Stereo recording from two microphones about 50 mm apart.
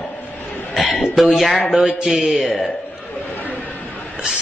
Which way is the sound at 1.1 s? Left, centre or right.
Centre.